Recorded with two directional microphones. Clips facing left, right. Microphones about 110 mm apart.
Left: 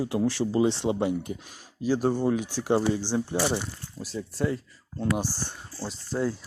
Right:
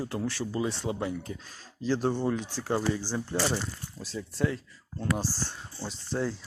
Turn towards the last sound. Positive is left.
turn(degrees=5)  # may be behind; listen again after turning